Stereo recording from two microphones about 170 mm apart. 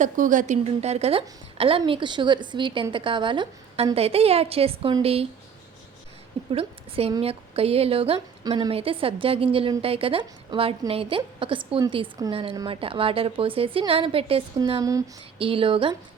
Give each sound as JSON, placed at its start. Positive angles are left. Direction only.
{"t": 0.0, "sound": "a woman's voice", "side_deg": -50}
{"t": 6.5, "sound": "a woman's voice", "side_deg": -35}
{"t": 14.6, "sound": "a woman's voice", "side_deg": -20}
{"t": 15.4, "sound": "a woman's voice", "side_deg": -30}